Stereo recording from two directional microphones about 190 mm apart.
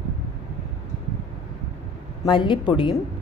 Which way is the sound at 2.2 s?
25° left (ahead or behind).